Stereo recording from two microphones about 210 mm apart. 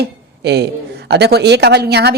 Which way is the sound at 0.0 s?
50° right (ahead or behind).